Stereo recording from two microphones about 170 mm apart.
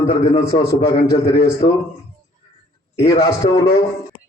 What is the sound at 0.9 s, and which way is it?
Speech, 70° left (ahead or behind).